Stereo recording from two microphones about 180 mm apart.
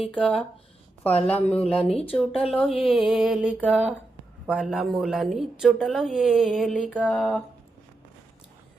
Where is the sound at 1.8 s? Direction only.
35° left (ahead or behind).